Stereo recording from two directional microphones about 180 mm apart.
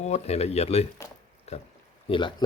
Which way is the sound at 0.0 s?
35° left (ahead or behind).